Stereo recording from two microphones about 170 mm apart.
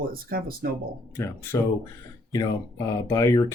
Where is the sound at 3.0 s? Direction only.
20° left (ahead or behind).